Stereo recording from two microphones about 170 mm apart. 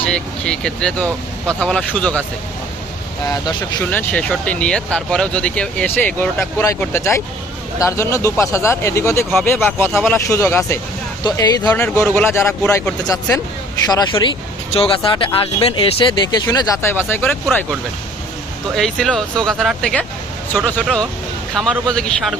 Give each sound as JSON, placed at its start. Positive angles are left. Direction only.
{"t": 0.0, "sound": "speech", "side_deg": 5}
{"t": 3.2, "sound": "speech", "side_deg": 20}
{"t": 3.8, "sound": "speech", "side_deg": 5}
{"t": 11.7, "sound": "speech", "side_deg": 10}
{"t": 13.8, "sound": "speech", "side_deg": 25}
{"t": 18.8, "sound": "speech", "side_deg": 5}